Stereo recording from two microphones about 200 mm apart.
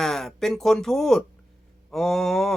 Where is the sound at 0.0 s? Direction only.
Centre (ahead or behind).